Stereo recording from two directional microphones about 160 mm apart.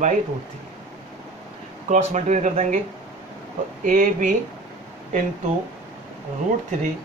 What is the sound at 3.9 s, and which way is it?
Speech, 55° right (ahead or behind).